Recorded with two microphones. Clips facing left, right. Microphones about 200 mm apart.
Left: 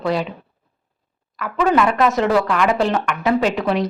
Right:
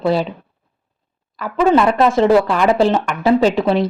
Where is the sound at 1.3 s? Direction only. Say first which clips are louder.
Right 3 dB; 30° right (ahead or behind).